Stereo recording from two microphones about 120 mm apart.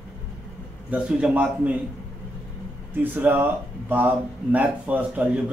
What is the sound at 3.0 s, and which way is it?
A man's voice, 15° right (ahead or behind).